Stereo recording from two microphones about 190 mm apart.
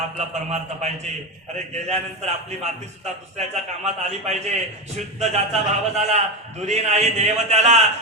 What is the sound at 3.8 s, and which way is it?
A man's voice, 35° right (ahead or behind).